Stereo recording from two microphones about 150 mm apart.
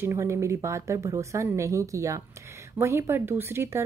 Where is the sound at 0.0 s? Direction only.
20° right (ahead or behind).